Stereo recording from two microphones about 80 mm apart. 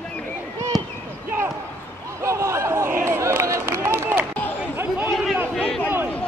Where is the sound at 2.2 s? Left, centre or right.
Right.